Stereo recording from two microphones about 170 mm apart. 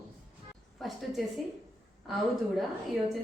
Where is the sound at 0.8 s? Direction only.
Centre (ahead or behind).